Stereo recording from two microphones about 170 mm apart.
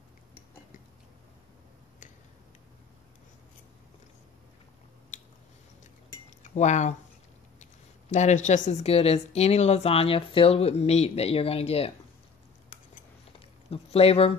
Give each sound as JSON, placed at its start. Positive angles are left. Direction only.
{"t": 5.1, "sound": "squish", "side_deg": 50}
{"t": 6.4, "sound": "speech", "side_deg": 45}
{"t": 8.1, "sound": "a woman's voice", "side_deg": 45}
{"t": 13.7, "sound": "speech", "side_deg": 35}